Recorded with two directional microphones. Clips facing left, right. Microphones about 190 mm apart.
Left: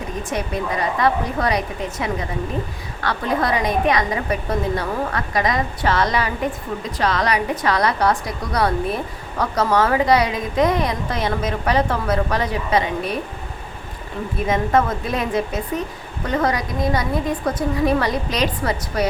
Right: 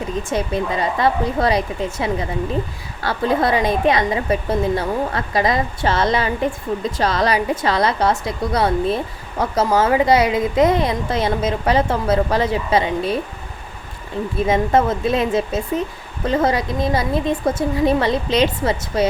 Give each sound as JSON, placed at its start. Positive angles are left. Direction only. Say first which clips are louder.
{"t": 0.2, "sound": "a woman's voice", "louder": "right 3 dB", "side_deg": -25}
{"t": 14.4, "sound": "a woman's voice", "louder": "right 2 dB", "side_deg": -25}